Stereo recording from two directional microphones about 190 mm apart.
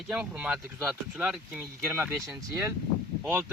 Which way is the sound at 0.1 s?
5° right (ahead or behind).